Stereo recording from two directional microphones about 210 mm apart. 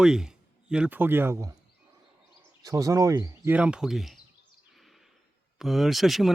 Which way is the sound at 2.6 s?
15° right (ahead or behind).